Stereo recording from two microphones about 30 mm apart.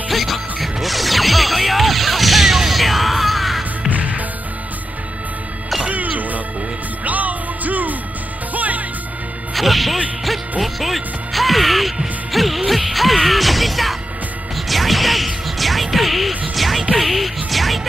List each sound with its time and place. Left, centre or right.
0.1 s music: centre
3.9 s music: right
5.9 s music: right
9.5 s music: centre